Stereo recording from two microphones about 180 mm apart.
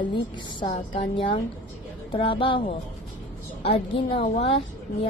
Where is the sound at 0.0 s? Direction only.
25° left (ahead or behind).